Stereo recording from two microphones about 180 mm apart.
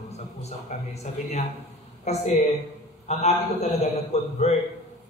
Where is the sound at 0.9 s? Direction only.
35° left (ahead or behind).